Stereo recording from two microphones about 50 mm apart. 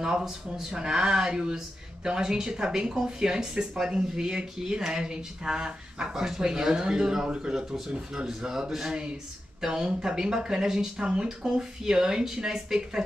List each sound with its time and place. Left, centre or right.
0.0 s speech: centre